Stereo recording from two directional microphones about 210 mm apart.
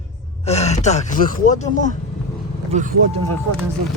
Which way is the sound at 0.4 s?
30° left (ahead or behind).